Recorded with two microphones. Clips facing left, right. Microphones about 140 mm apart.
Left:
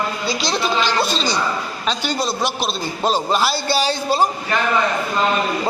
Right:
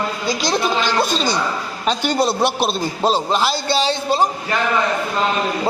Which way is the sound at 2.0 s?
60° right (ahead or behind).